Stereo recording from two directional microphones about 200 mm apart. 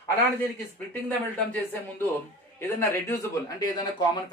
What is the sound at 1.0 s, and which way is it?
Speech, 10° left (ahead or behind).